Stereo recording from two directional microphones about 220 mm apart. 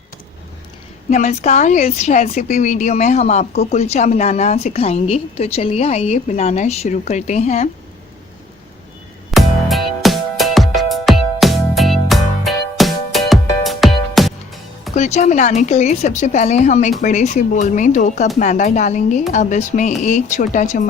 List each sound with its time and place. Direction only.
1.1 s a woman's voice: 30° left (ahead or behind)
9.3 s music: centre (ahead or behind)
14.9 s a woman's voice: 30° left (ahead or behind)